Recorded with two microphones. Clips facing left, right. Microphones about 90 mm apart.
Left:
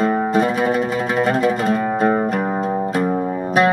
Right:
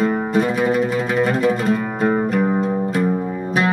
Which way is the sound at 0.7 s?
25° left (ahead or behind).